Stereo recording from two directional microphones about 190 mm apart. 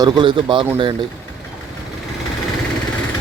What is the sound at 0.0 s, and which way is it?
Speech, 25° right (ahead or behind).